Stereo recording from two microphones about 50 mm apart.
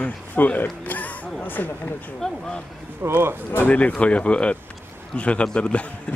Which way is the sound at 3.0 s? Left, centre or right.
Right.